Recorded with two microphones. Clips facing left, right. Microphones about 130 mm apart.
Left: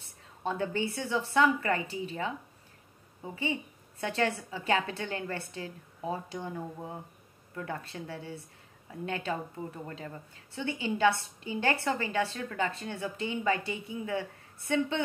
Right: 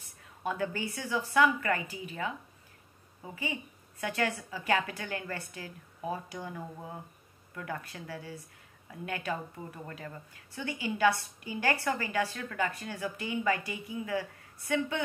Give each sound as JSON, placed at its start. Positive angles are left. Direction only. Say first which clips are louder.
{"t": 0.4, "sound": "a woman's voice", "louder": "left 2 dB", "side_deg": 25}
{"t": 4.0, "sound": "a woman's voice", "louder": "left 2 dB", "side_deg": 25}